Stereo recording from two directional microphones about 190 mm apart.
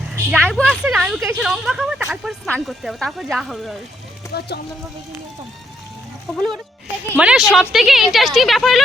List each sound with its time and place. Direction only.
0.1 s a woman's voice: 5° right (ahead or behind)
4.4 s speech: 60° left (ahead or behind)
7.2 s speech: 5° right (ahead or behind)